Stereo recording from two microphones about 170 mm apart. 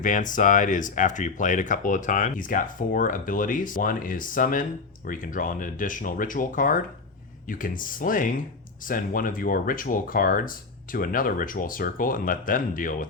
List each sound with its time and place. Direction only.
0.0 s speech: 50° left (ahead or behind)